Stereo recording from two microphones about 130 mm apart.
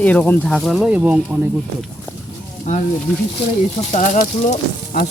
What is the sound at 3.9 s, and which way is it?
Speech, 75° left (ahead or behind).